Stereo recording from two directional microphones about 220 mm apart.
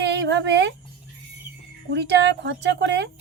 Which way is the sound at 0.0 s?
50° right (ahead or behind).